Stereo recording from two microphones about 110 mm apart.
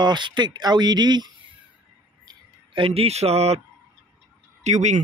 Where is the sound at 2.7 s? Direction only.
55° right (ahead or behind); by 3.6 s 70° right (ahead or behind).